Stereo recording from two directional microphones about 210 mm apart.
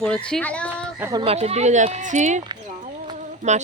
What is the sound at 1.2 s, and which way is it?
Speech, 30° right (ahead or behind).